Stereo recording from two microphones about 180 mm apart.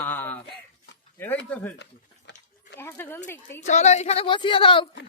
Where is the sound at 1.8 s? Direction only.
75° left (ahead or behind).